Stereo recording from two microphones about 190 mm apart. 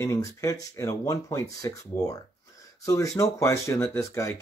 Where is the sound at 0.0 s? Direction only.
15° left (ahead or behind).